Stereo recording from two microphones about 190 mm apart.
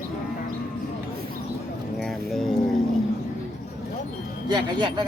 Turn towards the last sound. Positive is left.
turn(degrees=-25)  # may be behind; listen again after turning